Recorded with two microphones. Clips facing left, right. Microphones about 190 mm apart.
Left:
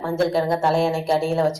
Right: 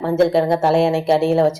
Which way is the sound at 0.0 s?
20° right (ahead or behind).